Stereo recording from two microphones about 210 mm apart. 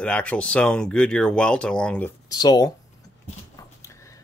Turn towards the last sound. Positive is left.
turn(degrees=15)  # may be behind; listen again after turning